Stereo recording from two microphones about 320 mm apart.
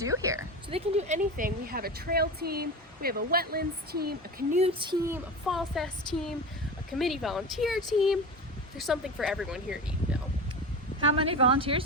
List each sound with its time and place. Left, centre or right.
0.0 s a woman's voice: centre
11.2 s a woman's voice: centre